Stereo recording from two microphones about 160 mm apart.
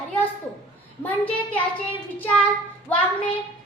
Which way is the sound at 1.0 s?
10° left (ahead or behind).